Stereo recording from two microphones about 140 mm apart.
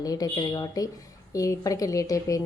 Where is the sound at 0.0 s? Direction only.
25° left (ahead or behind).